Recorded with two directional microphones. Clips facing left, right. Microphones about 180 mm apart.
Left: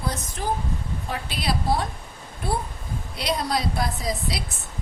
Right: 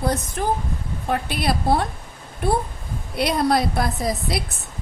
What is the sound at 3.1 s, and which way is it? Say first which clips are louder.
A woman's voice: right 6 dB; 55° right (ahead or behind).